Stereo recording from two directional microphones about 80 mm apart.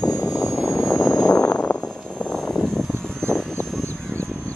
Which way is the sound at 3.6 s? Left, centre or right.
Centre.